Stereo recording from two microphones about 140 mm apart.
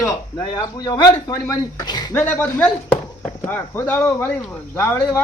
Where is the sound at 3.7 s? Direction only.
15° left (ahead or behind).